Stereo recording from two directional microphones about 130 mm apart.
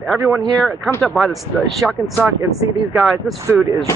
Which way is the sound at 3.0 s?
Centre (ahead or behind).